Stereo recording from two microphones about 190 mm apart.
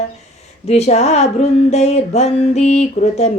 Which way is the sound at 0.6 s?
35° left (ahead or behind).